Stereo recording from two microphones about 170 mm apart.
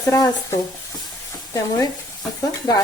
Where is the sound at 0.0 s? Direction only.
20° left (ahead or behind).